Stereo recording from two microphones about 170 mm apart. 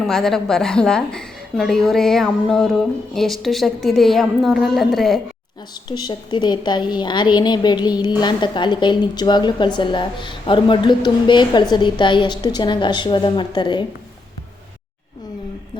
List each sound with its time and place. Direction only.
0.1 s a woman's voice: centre (ahead or behind)
5.9 s a woman's voice: 25° left (ahead or behind)